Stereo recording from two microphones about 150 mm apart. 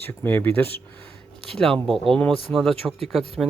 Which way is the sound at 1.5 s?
Centre (ahead or behind).